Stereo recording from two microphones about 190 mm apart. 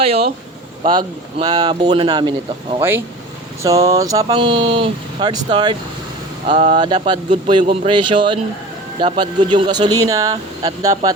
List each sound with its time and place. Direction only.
0.0 s speech: 30° right (ahead or behind)
3.6 s speech: 15° right (ahead or behind)
4.3 s speech: 30° right (ahead or behind)
6.5 s speech: 35° right (ahead or behind)
6.7 s speech: 25° right (ahead or behind)